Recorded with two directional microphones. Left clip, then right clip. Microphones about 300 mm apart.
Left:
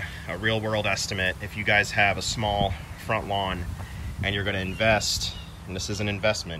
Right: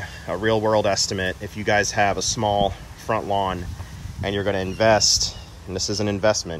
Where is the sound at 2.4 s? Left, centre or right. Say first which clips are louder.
Right 5 dB; right.